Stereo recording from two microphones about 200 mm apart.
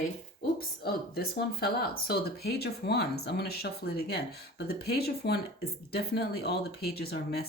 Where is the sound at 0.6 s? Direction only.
50° left (ahead or behind).